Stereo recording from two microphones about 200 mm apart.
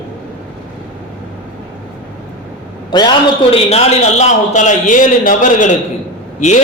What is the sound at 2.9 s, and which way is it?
A man's voice, 20° left (ahead or behind).